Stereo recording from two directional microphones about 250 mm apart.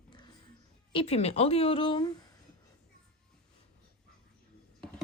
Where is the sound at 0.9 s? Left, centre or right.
Left.